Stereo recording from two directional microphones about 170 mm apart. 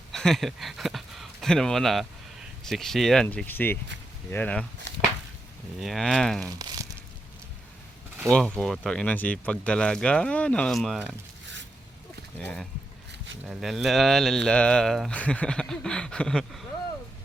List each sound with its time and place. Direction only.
0.1 s speech: centre (ahead or behind)
5.8 s speech: centre (ahead or behind)
6.4 s speech: 25° right (ahead or behind)
8.3 s speech: 5° left (ahead or behind)
12.4 s speech: 10° left (ahead or behind)
13.4 s speech: centre (ahead or behind)